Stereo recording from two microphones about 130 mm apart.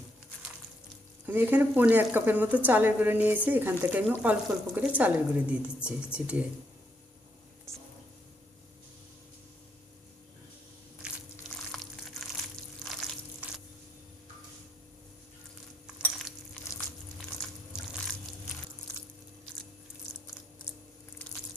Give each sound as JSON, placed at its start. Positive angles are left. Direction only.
{"t": 1.3, "sound": "a woman's voice", "side_deg": -15}
{"t": 7.7, "sound": "whispering", "side_deg": -20}
{"t": 11.7, "sound": "water", "side_deg": 0}
{"t": 12.8, "sound": "a sound", "side_deg": 0}